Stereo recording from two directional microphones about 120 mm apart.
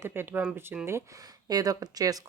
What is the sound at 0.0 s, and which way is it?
Speech, 20° right (ahead or behind).